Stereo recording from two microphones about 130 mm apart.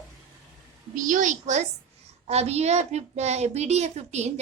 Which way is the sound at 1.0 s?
80° right.